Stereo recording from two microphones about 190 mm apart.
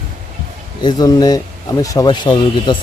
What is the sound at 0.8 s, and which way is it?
Speech, 20° left (ahead or behind).